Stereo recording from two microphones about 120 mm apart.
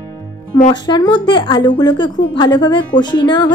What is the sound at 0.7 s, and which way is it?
A woman's voice, 35° left (ahead or behind).